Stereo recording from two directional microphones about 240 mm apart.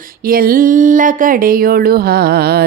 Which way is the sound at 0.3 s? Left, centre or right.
Right.